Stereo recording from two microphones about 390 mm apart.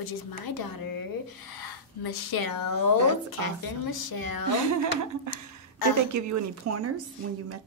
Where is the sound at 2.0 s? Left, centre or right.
Left.